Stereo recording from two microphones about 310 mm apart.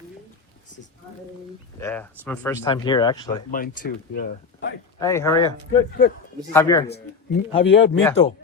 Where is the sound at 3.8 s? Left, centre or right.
Left.